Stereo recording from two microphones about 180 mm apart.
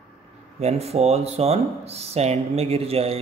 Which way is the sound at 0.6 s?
35° right (ahead or behind).